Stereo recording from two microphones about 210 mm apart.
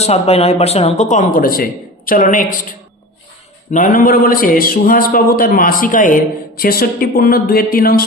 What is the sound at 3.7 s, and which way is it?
A man's voice, 40° left (ahead or behind).